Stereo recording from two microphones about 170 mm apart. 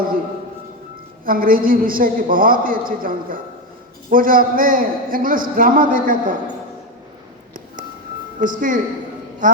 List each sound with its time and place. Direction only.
1.2 s a woman's voice: 55° right (ahead or behind)
8.4 s speech: 50° right (ahead or behind)